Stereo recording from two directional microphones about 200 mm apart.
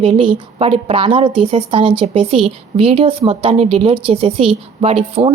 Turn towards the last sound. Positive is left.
turn(degrees=-30)  # may be behind; listen again after turning